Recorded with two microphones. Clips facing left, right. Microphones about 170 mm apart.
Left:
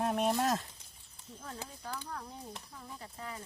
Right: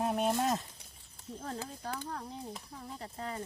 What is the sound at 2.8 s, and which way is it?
Speech, 35° right (ahead or behind).